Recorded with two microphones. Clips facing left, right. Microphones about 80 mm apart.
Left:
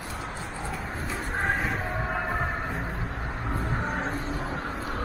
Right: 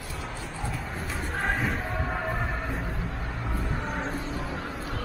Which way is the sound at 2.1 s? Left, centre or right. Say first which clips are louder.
Left 3 dB; left.